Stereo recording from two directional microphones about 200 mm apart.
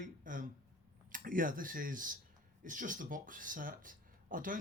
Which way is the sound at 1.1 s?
45° right (ahead or behind).